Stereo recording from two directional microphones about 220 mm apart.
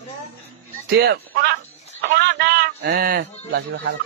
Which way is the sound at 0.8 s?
50° right (ahead or behind).